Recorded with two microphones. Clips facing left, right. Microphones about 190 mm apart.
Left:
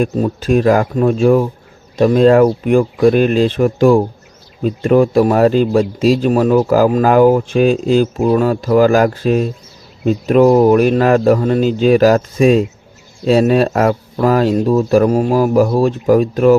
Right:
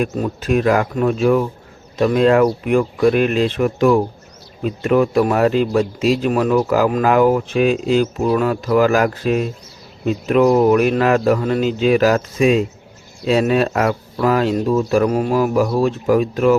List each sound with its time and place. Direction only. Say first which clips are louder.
0.0 s speech: left 4 dB; 30° left (ahead or behind)